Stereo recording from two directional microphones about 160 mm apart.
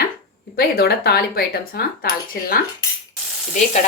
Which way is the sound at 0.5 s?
80° left.